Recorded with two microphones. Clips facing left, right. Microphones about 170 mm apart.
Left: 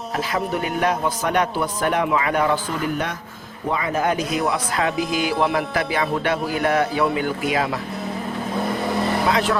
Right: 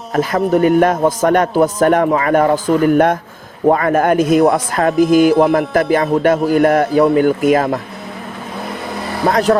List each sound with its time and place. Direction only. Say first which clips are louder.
0.1 s a man's voice: right 10 dB; 45° right (ahead or behind)
9.2 s a man's voice: right 11 dB; 40° right (ahead or behind)